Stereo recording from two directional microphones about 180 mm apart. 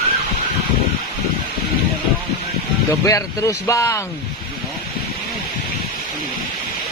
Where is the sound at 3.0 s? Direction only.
15° left (ahead or behind).